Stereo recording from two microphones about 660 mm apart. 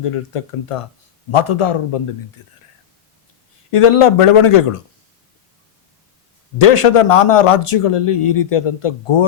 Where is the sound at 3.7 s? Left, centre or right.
Left.